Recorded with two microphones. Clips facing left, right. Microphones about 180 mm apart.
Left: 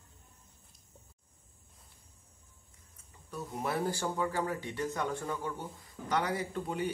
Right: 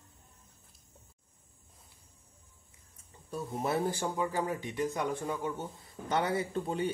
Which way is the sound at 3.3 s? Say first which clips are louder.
Right 3 dB; 30° right (ahead or behind).